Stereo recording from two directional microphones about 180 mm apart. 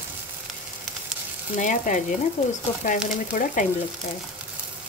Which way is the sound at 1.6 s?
45° left (ahead or behind).